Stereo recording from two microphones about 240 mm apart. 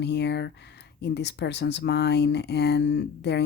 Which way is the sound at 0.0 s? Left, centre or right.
Left.